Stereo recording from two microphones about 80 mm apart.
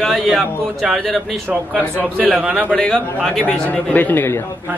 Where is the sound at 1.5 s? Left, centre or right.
Centre.